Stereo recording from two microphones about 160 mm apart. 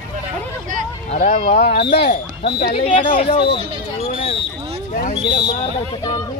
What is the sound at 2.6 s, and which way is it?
Speech, 35° left (ahead or behind).